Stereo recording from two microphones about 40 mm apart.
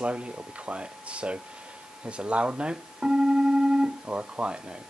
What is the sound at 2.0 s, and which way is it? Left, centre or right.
Keyboard, right.